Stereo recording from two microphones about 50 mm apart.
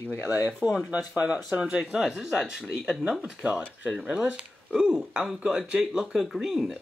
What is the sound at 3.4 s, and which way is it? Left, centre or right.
Speech, right.